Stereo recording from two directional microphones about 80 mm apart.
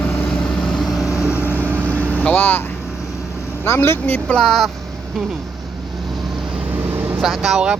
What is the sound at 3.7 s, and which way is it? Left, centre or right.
Speech, left.